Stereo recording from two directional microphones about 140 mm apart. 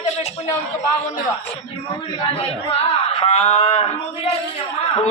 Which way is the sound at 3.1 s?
45° left (ahead or behind).